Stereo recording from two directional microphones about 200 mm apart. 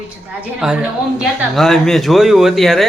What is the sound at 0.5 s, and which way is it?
Speech, 5° right (ahead or behind).